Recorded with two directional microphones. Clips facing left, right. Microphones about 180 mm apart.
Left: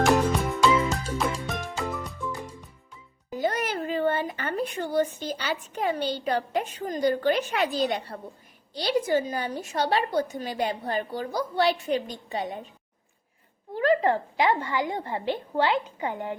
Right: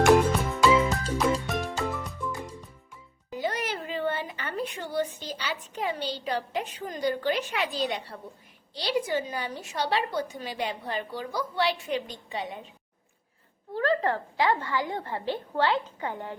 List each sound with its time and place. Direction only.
0.0 s music: centre (ahead or behind)
3.3 s a woman's voice: 45° left (ahead or behind)
13.7 s a woman's voice: 15° left (ahead or behind)